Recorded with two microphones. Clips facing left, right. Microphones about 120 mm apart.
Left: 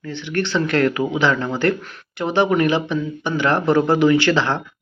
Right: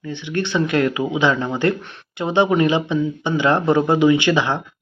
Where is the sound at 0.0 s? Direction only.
20° right (ahead or behind).